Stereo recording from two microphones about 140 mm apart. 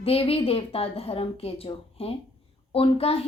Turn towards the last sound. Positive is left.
turn(degrees=45)  # may be behind; listen again after turning